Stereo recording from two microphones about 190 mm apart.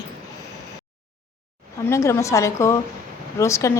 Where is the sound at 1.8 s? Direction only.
15° left (ahead or behind).